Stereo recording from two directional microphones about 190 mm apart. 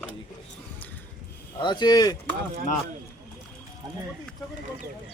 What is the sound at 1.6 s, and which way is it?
Speech, 20° left (ahead or behind).